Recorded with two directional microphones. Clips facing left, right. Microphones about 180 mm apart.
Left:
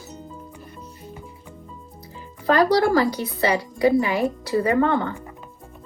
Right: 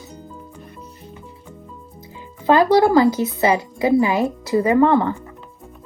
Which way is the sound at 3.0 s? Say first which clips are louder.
Right 5 dB; 25° right (ahead or behind).